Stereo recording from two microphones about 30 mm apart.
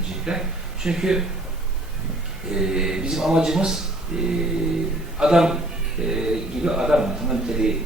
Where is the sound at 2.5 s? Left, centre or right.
Right.